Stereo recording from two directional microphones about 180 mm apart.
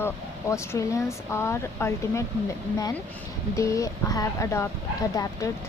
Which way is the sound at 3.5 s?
15° left (ahead or behind).